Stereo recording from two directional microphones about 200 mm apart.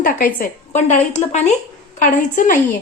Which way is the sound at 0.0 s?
45° left (ahead or behind).